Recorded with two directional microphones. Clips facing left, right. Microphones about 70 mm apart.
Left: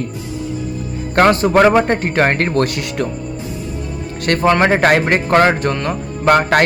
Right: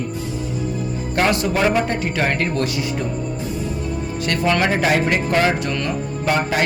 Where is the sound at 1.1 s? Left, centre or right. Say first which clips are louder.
Left 8 dB; left.